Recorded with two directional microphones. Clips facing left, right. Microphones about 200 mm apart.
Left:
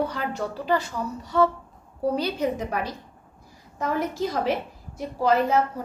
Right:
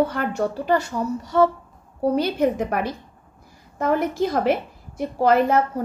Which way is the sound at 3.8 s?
55° right (ahead or behind).